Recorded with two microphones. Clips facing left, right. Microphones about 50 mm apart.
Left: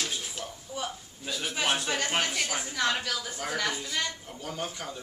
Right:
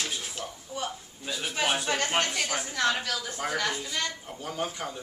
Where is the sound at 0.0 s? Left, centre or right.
Centre.